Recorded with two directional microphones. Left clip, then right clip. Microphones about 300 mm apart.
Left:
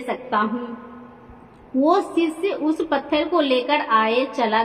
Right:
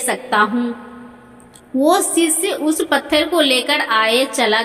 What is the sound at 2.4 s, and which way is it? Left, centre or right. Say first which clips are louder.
A woman's voice: right 4 dB; right.